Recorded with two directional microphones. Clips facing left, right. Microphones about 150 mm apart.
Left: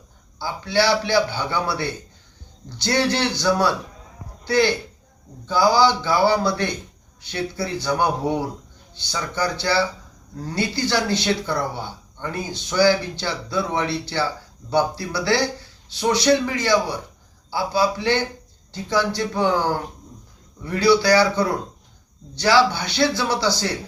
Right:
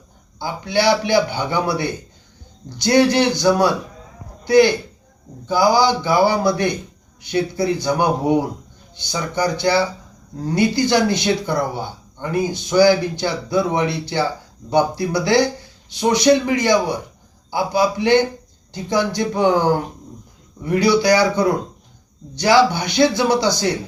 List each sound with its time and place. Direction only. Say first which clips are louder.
0.3 s speech: right 1 dB; 15° right (ahead or behind)